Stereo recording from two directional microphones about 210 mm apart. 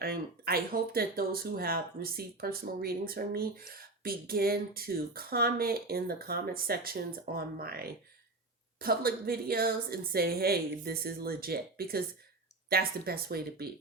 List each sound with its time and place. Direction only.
0.0 s speech: 45° right (ahead or behind)